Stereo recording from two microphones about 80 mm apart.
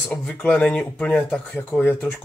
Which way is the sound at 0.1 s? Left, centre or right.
Centre.